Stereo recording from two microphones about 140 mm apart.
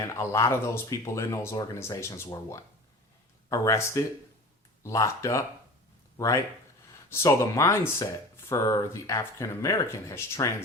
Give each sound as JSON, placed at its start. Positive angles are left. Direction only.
{"t": 0.0, "sound": "speech", "side_deg": 20}